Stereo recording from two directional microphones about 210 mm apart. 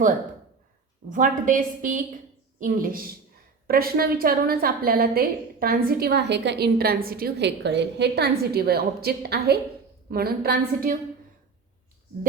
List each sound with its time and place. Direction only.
1.1 s a woman's voice: 40° right (ahead or behind)